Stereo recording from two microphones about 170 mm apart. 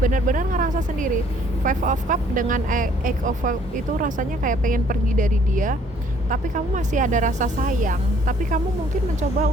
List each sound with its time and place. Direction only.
0.0 s speech: 50° right (ahead or behind)